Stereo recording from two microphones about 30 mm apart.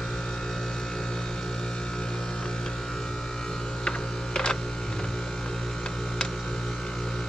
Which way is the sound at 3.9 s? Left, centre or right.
Left.